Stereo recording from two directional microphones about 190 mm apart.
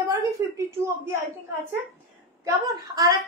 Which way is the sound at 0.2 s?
15° right (ahead or behind).